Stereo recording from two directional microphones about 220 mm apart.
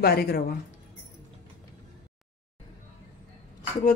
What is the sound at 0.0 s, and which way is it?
Speech, 45° left (ahead or behind).